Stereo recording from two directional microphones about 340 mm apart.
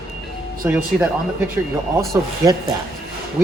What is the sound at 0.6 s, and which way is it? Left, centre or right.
Speech, centre.